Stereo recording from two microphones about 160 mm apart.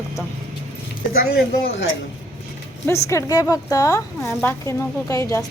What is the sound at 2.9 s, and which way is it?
A woman's voice, 20° left (ahead or behind).